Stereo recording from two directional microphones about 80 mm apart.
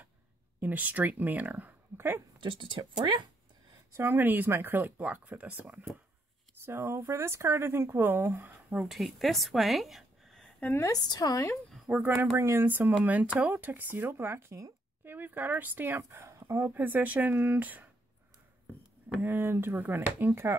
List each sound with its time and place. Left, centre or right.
0.6 s speech: right
2.4 s speech: right
3.9 s speech: right
6.6 s speech: right
8.8 s a woman's voice: centre
10.8 s a woman's voice: left
11.7 s a sound: centre
12.0 s speech: right
16.7 s speech: right
19.2 s speech: right